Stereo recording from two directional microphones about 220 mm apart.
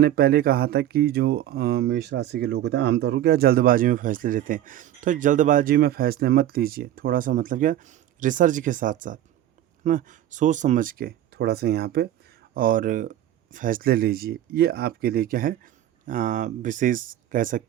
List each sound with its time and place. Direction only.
0.0 s speech: 45° right (ahead or behind)